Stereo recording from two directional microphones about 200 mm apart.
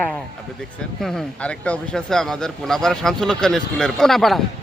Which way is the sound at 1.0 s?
5° left (ahead or behind).